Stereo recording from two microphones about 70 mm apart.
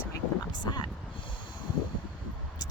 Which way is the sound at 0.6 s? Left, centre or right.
Left.